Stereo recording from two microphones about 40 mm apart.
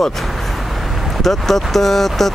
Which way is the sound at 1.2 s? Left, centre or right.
Centre.